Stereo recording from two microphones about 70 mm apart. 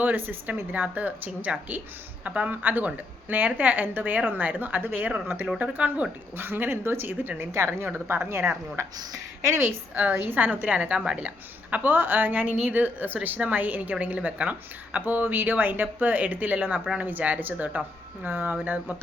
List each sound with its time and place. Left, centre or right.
0.0 s a woman's voice: right
9.5 s a woman's voice: right; by 11.3 s centre
11.7 s a woman's voice: right